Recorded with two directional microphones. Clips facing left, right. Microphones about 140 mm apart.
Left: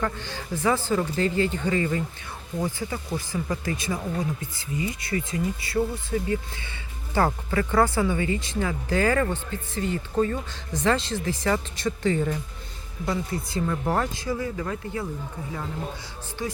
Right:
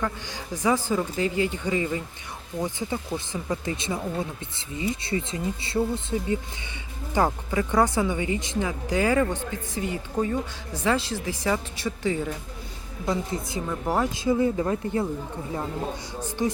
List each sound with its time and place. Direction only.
0.0 s speech: 15° right (ahead or behind)
13.1 s speech: 20° right (ahead or behind)
13.7 s speech: 10° right (ahead or behind)
14.2 s speech: 20° right (ahead or behind)
16.4 s speech: 20° right (ahead or behind)